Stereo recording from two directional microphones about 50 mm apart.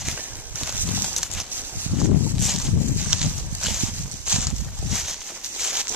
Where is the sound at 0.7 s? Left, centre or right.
Right.